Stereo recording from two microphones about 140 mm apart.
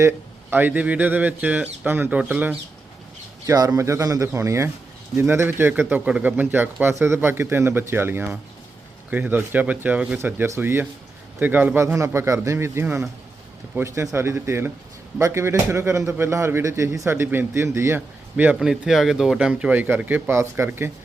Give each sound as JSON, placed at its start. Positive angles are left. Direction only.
{"t": 0.5, "sound": "speech", "side_deg": -10}
{"t": 3.4, "sound": "speech", "side_deg": -25}